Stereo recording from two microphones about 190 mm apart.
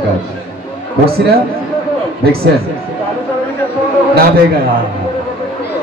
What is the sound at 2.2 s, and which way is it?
Speech, 50° right (ahead or behind).